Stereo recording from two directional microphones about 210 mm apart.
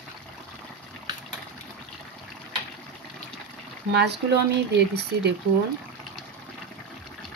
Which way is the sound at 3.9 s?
55° right (ahead or behind).